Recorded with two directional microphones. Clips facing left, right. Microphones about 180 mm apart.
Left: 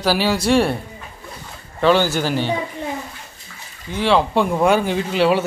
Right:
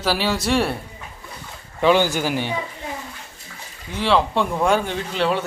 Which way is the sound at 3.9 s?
Centre (ahead or behind).